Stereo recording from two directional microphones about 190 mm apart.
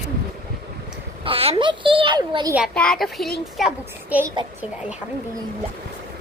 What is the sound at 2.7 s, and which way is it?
A woman's voice, 5° left (ahead or behind).